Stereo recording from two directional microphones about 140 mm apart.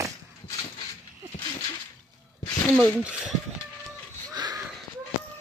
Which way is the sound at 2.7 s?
5° right (ahead or behind).